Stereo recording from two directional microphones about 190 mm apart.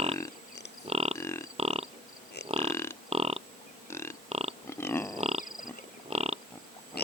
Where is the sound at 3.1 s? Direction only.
30° right (ahead or behind).